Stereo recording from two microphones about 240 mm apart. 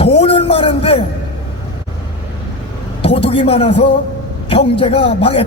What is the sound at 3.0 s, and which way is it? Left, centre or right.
A man's voice, left.